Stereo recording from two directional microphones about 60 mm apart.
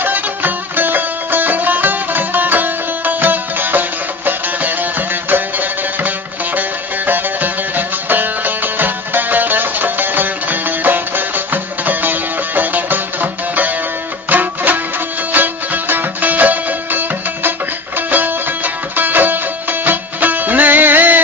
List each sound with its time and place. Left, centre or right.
0.0 s music: right